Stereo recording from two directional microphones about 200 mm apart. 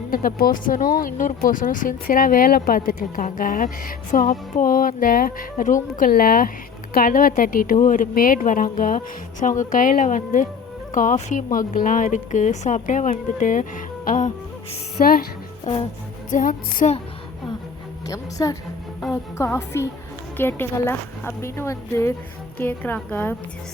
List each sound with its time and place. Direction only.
0.1 s speech: 45° left (ahead or behind)
16.3 s speech: 45° left (ahead or behind)
18.1 s speech: 15° left (ahead or behind)